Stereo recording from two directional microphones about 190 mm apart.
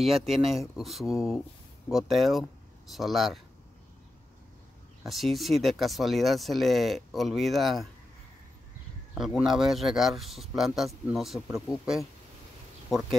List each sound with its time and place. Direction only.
0.3 s speech: centre (ahead or behind)
5.0 s speech: centre (ahead or behind)
9.1 s speech: centre (ahead or behind)